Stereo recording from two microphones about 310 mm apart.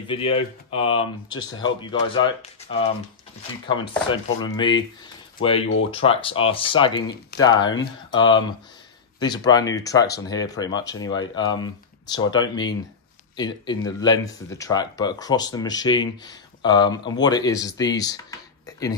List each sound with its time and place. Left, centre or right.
0.0 s speech: centre